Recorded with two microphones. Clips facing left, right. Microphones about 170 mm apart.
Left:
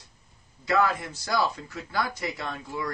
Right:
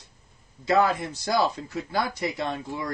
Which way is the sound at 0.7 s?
25° right (ahead or behind).